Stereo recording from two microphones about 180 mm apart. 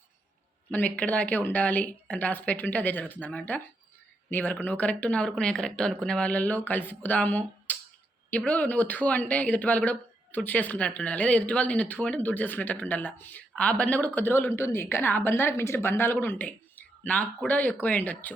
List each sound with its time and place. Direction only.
0.7 s speech: 10° left (ahead or behind)